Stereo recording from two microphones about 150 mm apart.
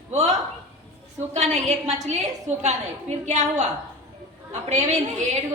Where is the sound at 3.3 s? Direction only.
50° right (ahead or behind).